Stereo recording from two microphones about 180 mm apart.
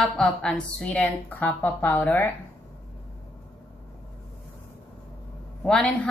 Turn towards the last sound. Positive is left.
turn(degrees=5)  # may be behind; listen again after turning